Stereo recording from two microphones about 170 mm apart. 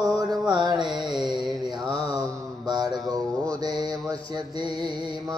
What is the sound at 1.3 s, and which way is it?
Mantra, centre (ahead or behind).